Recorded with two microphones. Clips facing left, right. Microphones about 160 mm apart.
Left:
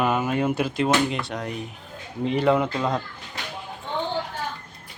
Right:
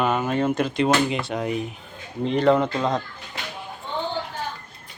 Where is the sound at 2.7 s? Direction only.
10° right (ahead or behind).